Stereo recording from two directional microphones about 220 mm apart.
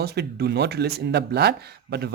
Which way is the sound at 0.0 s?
45° right (ahead or behind).